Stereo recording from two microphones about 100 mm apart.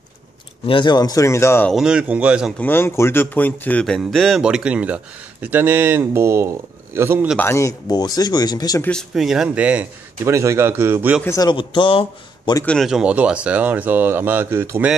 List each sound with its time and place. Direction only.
0.7 s speech: 50° left (ahead or behind); by 1.7 s 25° left (ahead or behind)
1.7 s speech: 5° right (ahead or behind)
2.6 s speech: 25° left (ahead or behind)
4.1 s speech: 5° left (ahead or behind)
4.4 s speech: 10° right (ahead or behind); by 7.2 s 25° right (ahead or behind)
7.3 s speech: 25° left (ahead or behind)
9.1 s speech: 5° right (ahead or behind)
10.2 s speech: 30° right (ahead or behind)
11.2 s speech: 35° left (ahead or behind)
11.5 s speech: 60° left (ahead or behind)
12.8 s speech: 5° right (ahead or behind); by 14.9 s 20° right (ahead or behind)